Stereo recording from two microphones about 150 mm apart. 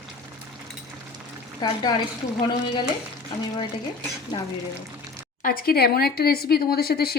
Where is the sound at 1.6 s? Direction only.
30° left (ahead or behind).